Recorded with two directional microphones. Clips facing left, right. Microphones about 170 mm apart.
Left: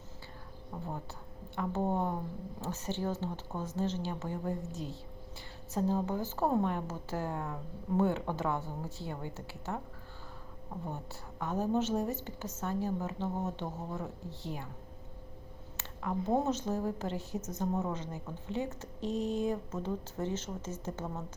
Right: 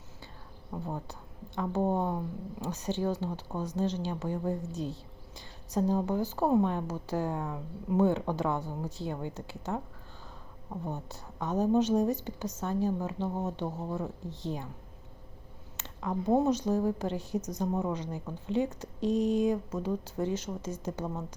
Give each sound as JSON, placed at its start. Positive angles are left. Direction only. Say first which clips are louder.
{"t": 0.7, "sound": "a woman's voice", "louder": "right 4 dB", "side_deg": -5}
{"t": 10.8, "sound": "a woman's voice", "louder": "right 4 dB", "side_deg": -20}
{"t": 15.8, "sound": "a woman's voice", "louder": "right 2 dB", "side_deg": -15}